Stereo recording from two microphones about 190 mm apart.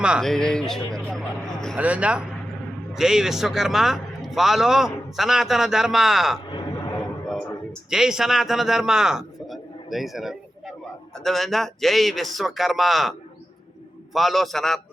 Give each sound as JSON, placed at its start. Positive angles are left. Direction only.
{"t": 0.0, "sound": "a man's voice", "side_deg": 0}
{"t": 1.7, "sound": "a man's voice", "side_deg": -5}
{"t": 7.9, "sound": "a man's voice", "side_deg": -5}